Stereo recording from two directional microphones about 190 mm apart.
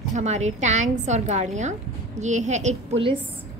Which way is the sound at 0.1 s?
35° right (ahead or behind).